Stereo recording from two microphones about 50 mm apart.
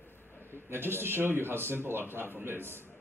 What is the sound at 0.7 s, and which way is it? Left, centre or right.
A man's voice, right.